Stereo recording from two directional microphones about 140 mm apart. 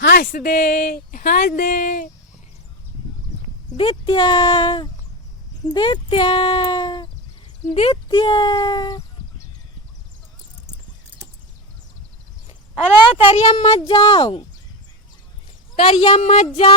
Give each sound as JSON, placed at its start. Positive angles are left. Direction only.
{"t": 0.2, "sound": "speech", "side_deg": 85}
{"t": 3.8, "sound": "speech", "side_deg": 40}
{"t": 12.5, "sound": "speech", "side_deg": 50}
{"t": 15.7, "sound": "speech", "side_deg": 50}